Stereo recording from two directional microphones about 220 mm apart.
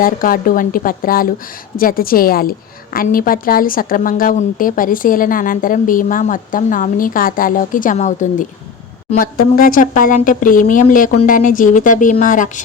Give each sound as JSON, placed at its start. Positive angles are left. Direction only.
{"t": 0.0, "sound": "a woman's voice", "side_deg": 40}